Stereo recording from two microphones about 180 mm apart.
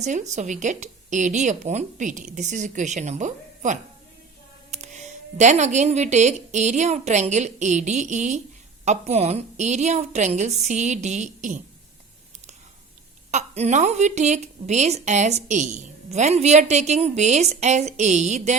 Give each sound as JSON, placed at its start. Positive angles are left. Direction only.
{"t": 0.0, "sound": "a woman's voice", "side_deg": -40}
{"t": 13.3, "sound": "a woman's voice", "side_deg": -40}